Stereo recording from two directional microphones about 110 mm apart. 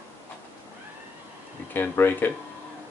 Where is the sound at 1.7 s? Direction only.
20° left (ahead or behind).